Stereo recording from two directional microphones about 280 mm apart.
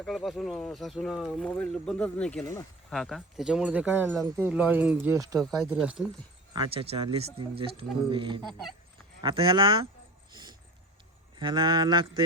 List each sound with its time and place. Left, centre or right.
0.0 s speech: centre
6.5 s speech: centre
11.3 s speech: centre